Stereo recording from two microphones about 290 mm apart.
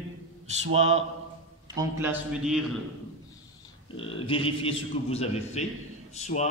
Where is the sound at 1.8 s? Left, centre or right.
Centre.